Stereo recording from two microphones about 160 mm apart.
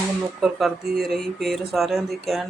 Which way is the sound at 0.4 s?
Centre (ahead or behind).